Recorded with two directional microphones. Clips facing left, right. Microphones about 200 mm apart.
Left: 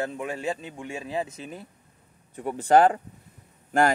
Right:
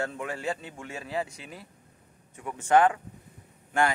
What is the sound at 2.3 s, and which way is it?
Speech, 35° left (ahead or behind).